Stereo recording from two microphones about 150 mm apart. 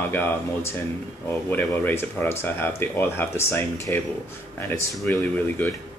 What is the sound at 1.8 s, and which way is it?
Speech, 15° left (ahead or behind).